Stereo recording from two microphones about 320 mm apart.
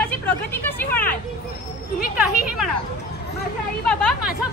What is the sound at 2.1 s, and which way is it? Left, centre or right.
Speech, centre.